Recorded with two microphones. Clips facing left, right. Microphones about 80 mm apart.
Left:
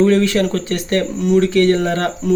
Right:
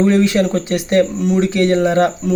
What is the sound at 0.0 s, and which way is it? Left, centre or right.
Speech, centre.